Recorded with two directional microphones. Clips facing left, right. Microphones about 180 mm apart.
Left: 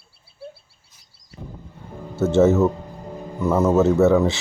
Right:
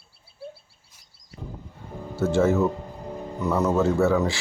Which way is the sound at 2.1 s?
25° left (ahead or behind).